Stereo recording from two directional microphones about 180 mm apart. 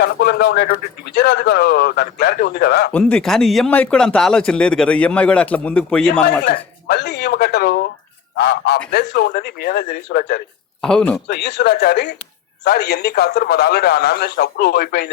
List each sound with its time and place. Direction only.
0.0 s a man's voice: 65° left (ahead or behind)
2.9 s speech: 5° left (ahead or behind)
6.4 s a man's voice: 65° left (ahead or behind)
10.8 s speech: 5° left (ahead or behind)
11.3 s a man's voice: 65° left (ahead or behind)